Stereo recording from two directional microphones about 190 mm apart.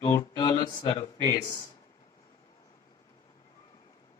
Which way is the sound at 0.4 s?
25° left (ahead or behind).